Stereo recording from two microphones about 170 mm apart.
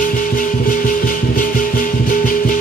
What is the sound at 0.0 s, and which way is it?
Music, 55° left (ahead or behind).